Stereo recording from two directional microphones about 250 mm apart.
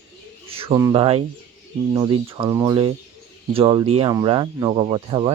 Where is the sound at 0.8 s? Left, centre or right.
Centre.